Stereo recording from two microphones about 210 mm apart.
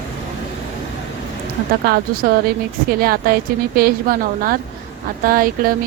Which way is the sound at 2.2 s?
45° right (ahead or behind).